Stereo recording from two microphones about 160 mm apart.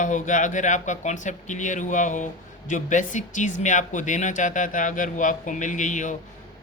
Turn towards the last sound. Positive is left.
turn(degrees=50)  # may be behind; listen again after turning